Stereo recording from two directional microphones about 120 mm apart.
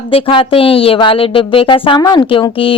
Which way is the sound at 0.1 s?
50° left (ahead or behind).